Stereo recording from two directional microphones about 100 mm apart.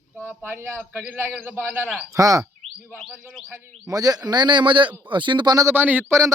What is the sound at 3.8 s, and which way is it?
A man's voice, 40° right (ahead or behind).